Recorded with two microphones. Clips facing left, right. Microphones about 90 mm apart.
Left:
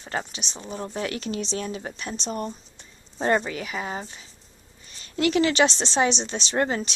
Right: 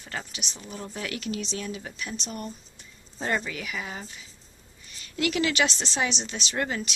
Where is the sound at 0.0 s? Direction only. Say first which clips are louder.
Left 6 dB; 30° left (ahead or behind).